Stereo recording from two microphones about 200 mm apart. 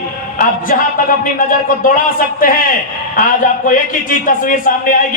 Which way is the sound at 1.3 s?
45° left (ahead or behind).